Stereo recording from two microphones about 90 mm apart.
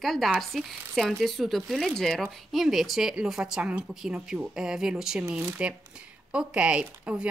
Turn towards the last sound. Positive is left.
turn(degrees=-15)  # may be behind; listen again after turning